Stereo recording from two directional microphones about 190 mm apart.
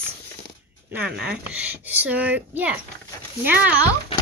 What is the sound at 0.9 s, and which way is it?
Speech, 5° right (ahead or behind).